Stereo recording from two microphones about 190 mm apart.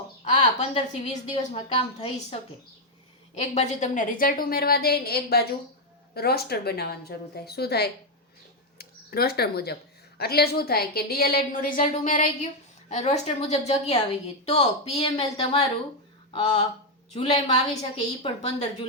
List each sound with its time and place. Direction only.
0.3 s a woman's voice: 35° left (ahead or behind)